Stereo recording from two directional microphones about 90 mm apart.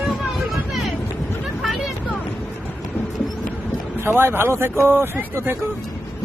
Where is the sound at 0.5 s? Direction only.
Centre (ahead or behind).